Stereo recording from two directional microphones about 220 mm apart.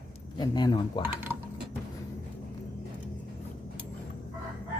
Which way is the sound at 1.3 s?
10° right (ahead or behind).